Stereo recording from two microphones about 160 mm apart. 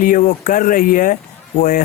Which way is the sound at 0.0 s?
55° left (ahead or behind).